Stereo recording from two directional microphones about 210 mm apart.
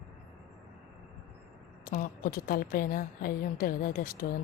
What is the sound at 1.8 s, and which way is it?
A woman's voice, 40° left (ahead or behind).